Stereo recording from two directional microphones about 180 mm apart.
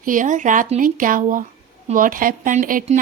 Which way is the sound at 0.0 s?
45° right (ahead or behind).